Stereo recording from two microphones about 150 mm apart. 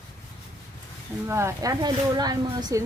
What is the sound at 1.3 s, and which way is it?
Speech, 20° right (ahead or behind).